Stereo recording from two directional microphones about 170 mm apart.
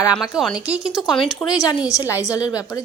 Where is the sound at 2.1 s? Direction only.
5° right (ahead or behind).